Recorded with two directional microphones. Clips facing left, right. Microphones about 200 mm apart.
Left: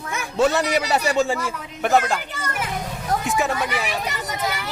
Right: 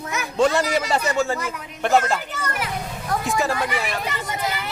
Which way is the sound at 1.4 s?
5° left (ahead or behind).